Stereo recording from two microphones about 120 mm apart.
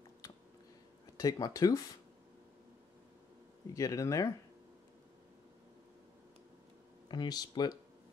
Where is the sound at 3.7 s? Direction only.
25° left (ahead or behind).